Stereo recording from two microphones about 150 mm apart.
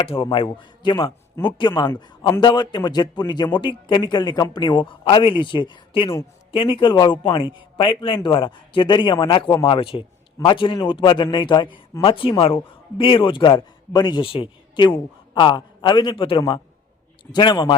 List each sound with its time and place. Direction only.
0.0 s a man's voice: 35° left (ahead or behind)